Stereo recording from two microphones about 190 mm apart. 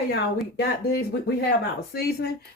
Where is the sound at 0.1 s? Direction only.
60° left (ahead or behind).